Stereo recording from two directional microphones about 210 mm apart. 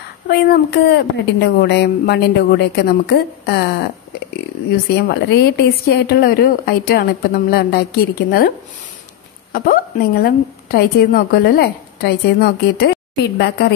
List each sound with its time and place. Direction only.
0.3 s a woman's voice: 50° left (ahead or behind)
4.9 s a woman's voice: 50° left (ahead or behind)